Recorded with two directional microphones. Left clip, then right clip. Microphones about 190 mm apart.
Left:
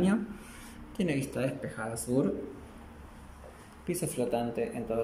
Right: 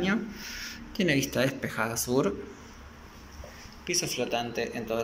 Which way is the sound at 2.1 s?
20° right (ahead or behind).